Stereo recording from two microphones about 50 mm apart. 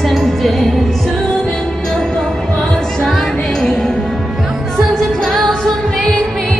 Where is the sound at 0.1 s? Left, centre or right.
Centre.